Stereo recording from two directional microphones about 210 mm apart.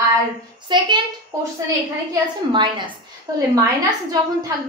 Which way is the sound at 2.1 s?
20° right (ahead or behind).